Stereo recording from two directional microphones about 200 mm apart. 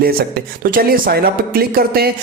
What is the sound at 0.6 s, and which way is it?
Speech, 45° right (ahead or behind).